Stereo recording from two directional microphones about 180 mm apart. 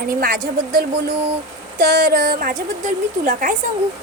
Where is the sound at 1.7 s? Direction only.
55° right (ahead or behind).